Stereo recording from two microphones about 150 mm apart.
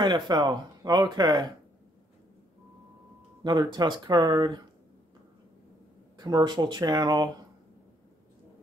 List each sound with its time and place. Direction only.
0.0 s speech: 30° right (ahead or behind)
3.4 s speech: 30° right (ahead or behind)
6.1 s speech: 25° right (ahead or behind)